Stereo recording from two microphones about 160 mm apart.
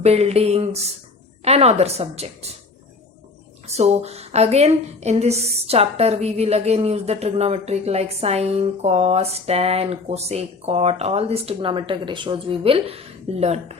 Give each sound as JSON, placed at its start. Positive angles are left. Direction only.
{"t": 0.0, "sound": "a woman's voice", "side_deg": -40}
{"t": 3.7, "sound": "a woman's voice", "side_deg": -40}